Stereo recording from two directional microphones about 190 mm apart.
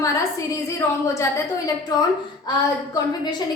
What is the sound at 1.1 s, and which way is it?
Speech, 15° left (ahead or behind).